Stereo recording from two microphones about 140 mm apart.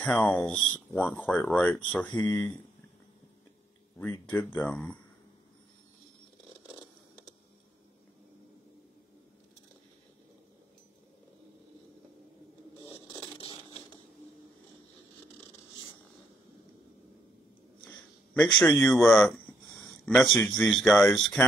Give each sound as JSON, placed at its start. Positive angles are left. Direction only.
{"t": 0.0, "sound": "speech", "side_deg": 10}
{"t": 4.0, "sound": "speech", "side_deg": 10}
{"t": 12.8, "sound": "a sound", "side_deg": 35}
{"t": 18.4, "sound": "speech", "side_deg": 5}